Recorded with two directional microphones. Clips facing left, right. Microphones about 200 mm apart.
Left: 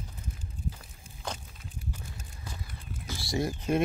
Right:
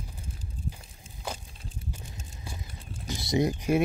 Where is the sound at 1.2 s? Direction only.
10° right (ahead or behind).